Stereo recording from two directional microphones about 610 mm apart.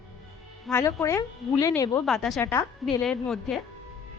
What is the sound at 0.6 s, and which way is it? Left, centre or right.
A woman's voice, centre.